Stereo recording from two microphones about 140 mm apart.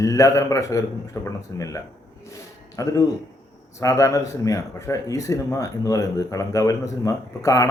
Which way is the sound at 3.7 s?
25° left (ahead or behind).